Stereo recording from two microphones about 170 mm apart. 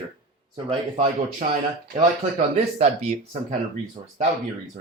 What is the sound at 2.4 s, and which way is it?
Speech, 40° right (ahead or behind).